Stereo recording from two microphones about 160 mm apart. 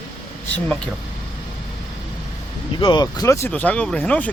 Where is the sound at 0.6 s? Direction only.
5° left (ahead or behind).